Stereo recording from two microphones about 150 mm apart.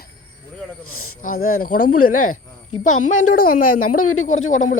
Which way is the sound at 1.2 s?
70° left (ahead or behind).